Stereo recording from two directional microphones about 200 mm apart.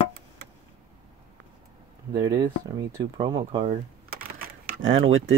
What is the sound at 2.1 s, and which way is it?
Speech, 15° right (ahead or behind).